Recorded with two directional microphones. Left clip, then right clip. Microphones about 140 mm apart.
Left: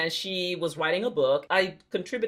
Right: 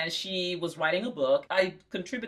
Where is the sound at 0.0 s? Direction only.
45° left (ahead or behind).